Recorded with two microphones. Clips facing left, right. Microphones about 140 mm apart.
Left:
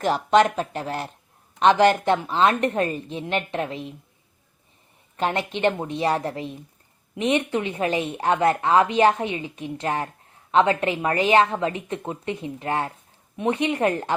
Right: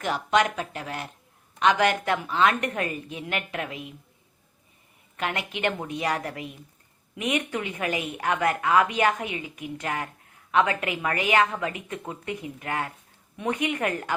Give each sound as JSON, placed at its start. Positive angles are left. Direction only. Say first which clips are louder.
{"t": 0.0, "sound": "a woman's voice", "louder": "left 5 dB", "side_deg": 35}
{"t": 5.1, "sound": "speech", "louder": "left 6 dB", "side_deg": 30}